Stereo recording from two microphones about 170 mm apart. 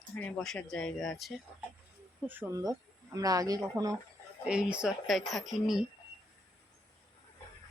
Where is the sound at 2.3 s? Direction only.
15° right (ahead or behind).